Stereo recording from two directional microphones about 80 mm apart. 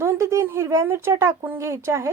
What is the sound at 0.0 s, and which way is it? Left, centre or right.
Speech, right.